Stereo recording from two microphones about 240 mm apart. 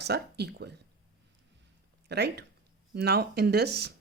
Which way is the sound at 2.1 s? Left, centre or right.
Right.